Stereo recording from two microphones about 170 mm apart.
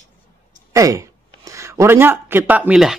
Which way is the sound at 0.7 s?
20° right (ahead or behind).